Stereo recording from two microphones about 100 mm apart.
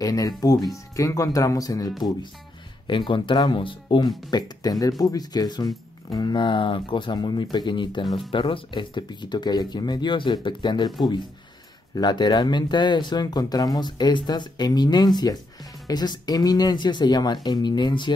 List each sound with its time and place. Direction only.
0.0 s speech: 35° left (ahead or behind)
2.9 s speech: 55° left (ahead or behind)
4.3 s speech: 40° left (ahead or behind)
11.9 s speech: 45° left (ahead or behind)